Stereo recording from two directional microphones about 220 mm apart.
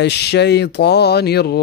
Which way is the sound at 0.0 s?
50° left (ahead or behind).